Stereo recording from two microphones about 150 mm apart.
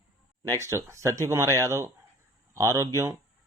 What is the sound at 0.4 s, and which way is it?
A man's voice, 20° right (ahead or behind).